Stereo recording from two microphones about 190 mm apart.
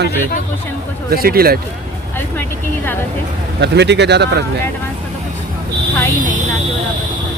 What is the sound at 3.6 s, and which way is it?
Speech, 65° right (ahead or behind).